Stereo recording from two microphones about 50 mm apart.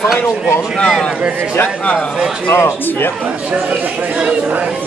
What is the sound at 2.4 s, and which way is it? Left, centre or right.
Speech, left.